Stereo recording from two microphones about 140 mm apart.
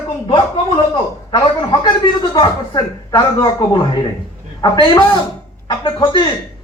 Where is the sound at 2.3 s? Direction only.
30° left (ahead or behind).